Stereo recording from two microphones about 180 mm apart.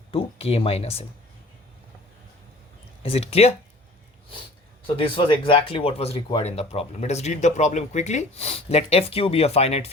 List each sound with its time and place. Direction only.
0.1 s speech: 30° left (ahead or behind)
3.0 s speech: 35° left (ahead or behind)
4.9 s speech: 30° left (ahead or behind)